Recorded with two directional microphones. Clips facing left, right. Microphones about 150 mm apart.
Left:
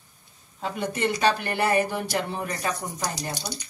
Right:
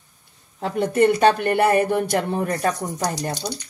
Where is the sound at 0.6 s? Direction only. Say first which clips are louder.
Right 9 dB; 55° right (ahead or behind).